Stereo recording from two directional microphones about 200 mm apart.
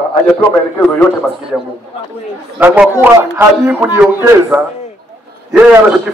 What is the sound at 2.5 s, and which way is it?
A man's voice, 10° right (ahead or behind).